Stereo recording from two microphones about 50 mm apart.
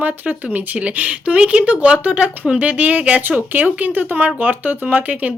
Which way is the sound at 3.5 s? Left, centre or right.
Right.